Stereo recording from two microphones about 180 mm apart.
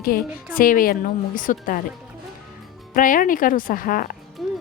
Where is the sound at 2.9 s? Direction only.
50° left (ahead or behind).